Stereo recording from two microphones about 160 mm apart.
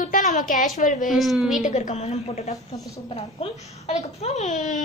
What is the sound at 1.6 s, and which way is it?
A woman's voice, 50° left (ahead or behind).